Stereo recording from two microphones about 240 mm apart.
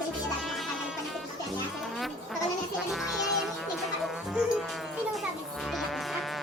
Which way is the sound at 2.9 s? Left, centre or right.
Centre.